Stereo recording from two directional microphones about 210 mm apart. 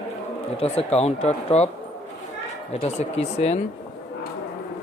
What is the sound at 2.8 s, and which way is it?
Speech, 30° left (ahead or behind).